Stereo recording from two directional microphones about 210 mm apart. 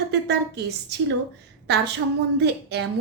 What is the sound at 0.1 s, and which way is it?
A woman's voice, 55° right (ahead or behind).